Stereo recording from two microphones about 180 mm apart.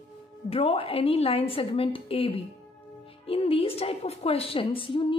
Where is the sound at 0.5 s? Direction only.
30° left (ahead or behind).